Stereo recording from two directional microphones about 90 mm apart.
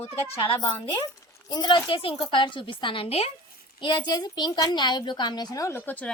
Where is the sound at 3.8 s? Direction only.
55° left (ahead or behind).